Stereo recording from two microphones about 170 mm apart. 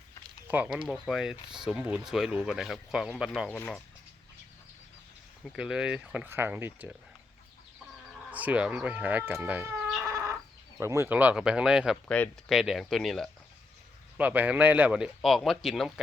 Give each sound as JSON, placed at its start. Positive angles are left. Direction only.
{"t": 0.4, "sound": "speech", "side_deg": -10}
{"t": 5.5, "sound": "speech", "side_deg": -5}
{"t": 8.3, "sound": "speech", "side_deg": -10}
{"t": 10.1, "sound": "chicken", "side_deg": -20}
{"t": 10.8, "sound": "speech", "side_deg": -15}
{"t": 12.0, "sound": "speech", "side_deg": 10}
{"t": 14.2, "sound": "speech", "side_deg": -10}